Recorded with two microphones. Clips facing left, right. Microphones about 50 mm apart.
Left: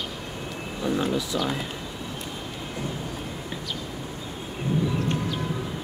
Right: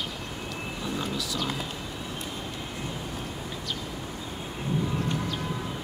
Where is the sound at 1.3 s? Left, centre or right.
Centre.